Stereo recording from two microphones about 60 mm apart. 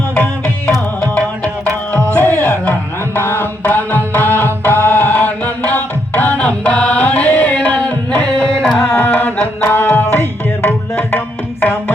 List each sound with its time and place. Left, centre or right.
1.1 s music: centre
2.1 s music: left
3.6 s tabla: left
4.9 s music: left; by 9.0 s centre
9.0 s music: left